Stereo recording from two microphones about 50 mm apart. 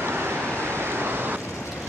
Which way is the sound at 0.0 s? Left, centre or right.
Right.